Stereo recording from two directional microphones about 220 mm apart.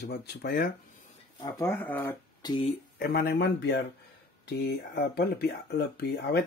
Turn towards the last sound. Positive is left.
turn(degrees=45)  # may be behind; listen again after turning